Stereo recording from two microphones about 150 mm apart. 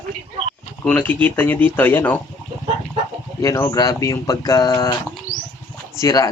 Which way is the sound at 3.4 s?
20° left (ahead or behind).